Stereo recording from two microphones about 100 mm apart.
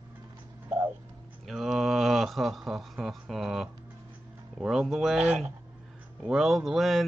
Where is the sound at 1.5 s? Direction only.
Centre (ahead or behind).